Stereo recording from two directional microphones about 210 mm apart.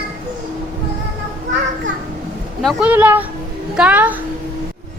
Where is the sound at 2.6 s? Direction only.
5° right (ahead or behind).